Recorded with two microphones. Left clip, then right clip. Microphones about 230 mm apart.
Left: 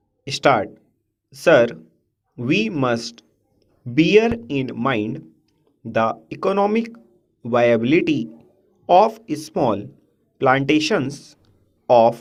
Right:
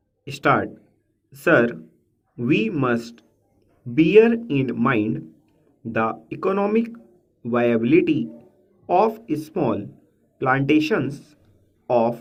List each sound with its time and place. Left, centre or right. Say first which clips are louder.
0.3 s speech: left 3 dB; left